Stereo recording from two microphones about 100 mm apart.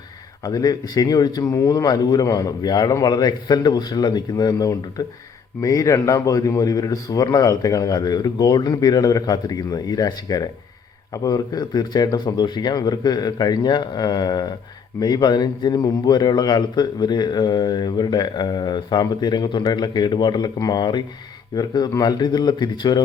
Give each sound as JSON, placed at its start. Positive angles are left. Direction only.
{"t": 0.4, "sound": "a man's voice", "side_deg": 40}